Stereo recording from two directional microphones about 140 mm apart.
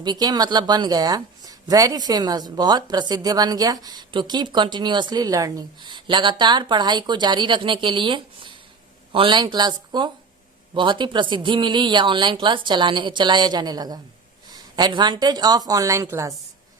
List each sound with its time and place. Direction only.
0.0 s speech: 30° right (ahead or behind)